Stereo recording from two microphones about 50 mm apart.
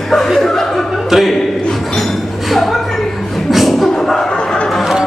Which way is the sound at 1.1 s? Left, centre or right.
Centre.